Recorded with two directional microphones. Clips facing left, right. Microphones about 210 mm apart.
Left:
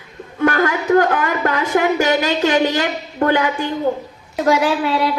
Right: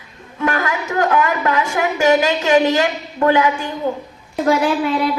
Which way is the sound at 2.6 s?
45° right (ahead or behind).